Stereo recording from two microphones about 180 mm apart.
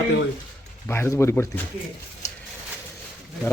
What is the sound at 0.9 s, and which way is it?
Speech, 15° left (ahead or behind).